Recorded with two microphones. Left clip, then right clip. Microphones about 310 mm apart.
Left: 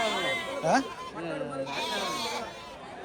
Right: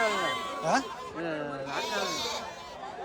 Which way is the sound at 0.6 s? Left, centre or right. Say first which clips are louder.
Left 2 dB; centre.